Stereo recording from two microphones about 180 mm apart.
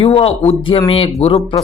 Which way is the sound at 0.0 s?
30° left (ahead or behind).